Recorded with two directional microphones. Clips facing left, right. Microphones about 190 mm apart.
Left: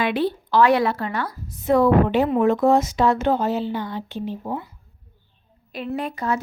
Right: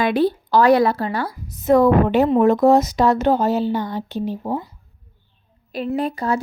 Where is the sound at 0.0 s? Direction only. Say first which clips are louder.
Right 4 dB; 40° right (ahead or behind).